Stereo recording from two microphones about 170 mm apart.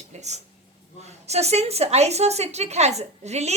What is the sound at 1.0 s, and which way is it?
A woman's voice, 40° right (ahead or behind).